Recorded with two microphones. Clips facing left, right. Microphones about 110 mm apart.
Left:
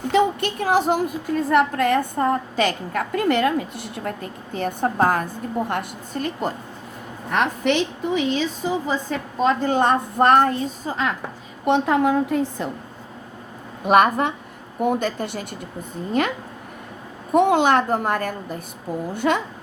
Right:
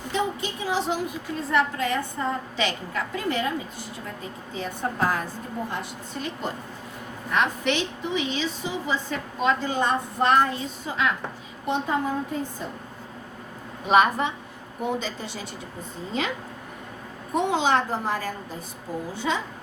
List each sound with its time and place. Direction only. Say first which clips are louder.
0.1 s a sound: left 8 dB; 65° left (ahead or behind); by 0.9 s 50° left (ahead or behind)
1.5 s a woman's voice: left 5 dB; 55° left (ahead or behind); by 11.1 s 40° left (ahead or behind)
11.6 s a woman's voice: left 7 dB; 70° left (ahead or behind)
13.8 s a woman's voice: left 3 dB; 55° left (ahead or behind)
17.3 s a woman's voice: left 6 dB; 55° left (ahead or behind)